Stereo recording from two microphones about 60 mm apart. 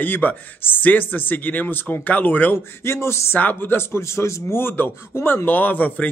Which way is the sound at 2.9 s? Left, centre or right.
Left.